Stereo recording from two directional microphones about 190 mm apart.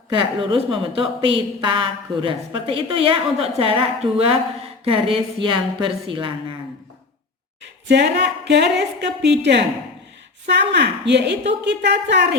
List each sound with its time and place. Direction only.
0.1 s a woman's voice: 25° right (ahead or behind)
7.9 s a woman's voice: 65° right (ahead or behind)